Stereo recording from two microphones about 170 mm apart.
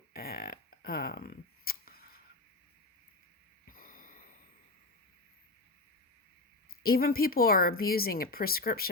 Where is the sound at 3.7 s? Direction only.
55° left (ahead or behind).